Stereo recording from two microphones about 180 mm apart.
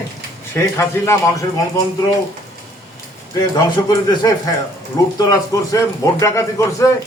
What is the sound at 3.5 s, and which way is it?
A man's voice, 20° left (ahead or behind).